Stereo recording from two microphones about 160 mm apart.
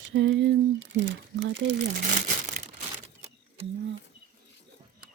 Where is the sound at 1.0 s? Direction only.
90° right; by 2.7 s 50° right (ahead or behind).